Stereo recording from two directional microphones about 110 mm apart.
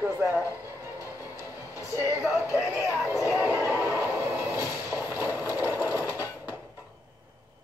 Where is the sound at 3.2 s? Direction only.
20° right (ahead or behind).